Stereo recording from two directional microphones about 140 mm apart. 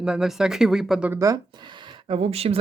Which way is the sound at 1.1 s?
25° right (ahead or behind).